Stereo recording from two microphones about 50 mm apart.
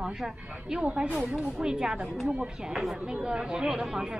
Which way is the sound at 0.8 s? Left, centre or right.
Right.